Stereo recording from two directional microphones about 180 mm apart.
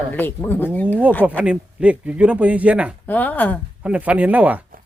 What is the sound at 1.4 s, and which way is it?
A man's voice, 5° right (ahead or behind).